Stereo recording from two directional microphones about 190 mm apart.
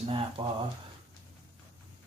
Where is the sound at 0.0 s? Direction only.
30° right (ahead or behind).